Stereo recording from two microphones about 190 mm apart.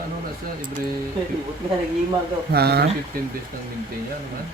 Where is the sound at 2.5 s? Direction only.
55° right (ahead or behind).